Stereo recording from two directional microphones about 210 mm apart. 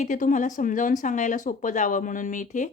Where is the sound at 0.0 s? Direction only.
35° left (ahead or behind).